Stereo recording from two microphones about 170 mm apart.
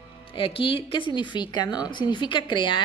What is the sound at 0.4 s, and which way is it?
A woman's voice, 30° left (ahead or behind).